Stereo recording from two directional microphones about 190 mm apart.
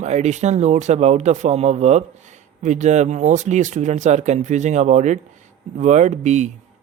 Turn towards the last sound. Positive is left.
turn(degrees=-40)  # may be behind; listen again after turning